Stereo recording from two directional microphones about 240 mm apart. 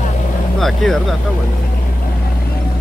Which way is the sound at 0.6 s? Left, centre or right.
Centre.